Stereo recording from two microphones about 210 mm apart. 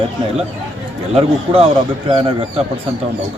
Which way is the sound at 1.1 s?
25° right (ahead or behind).